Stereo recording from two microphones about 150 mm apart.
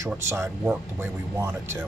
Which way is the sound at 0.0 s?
20° right (ahead or behind).